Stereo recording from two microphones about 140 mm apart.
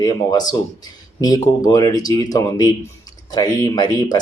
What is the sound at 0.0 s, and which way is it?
Speech, 25° left (ahead or behind).